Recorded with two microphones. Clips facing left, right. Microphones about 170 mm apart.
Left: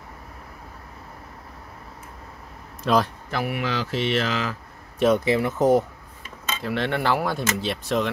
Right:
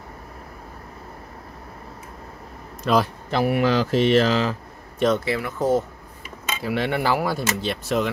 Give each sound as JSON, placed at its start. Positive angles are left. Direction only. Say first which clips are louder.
{"t": 2.8, "sound": "a man's voice", "louder": "right 1 dB", "side_deg": 0}
{"t": 3.3, "sound": "speech", "louder": "right 6 dB", "side_deg": -25}
{"t": 3.5, "sound": "speech", "louder": "right 7 dB", "side_deg": -40}
{"t": 4.9, "sound": "speech", "louder": "left 1 dB", "side_deg": 5}
{"t": 5.2, "sound": "speech", "louder": "left 3 dB", "side_deg": 20}
{"t": 6.4, "sound": "speech", "louder": "right 2 dB", "side_deg": -10}